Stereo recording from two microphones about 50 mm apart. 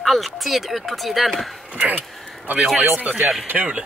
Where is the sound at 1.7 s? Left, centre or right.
Right.